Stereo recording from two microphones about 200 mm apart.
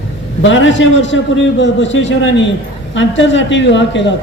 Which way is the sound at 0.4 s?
70° left (ahead or behind).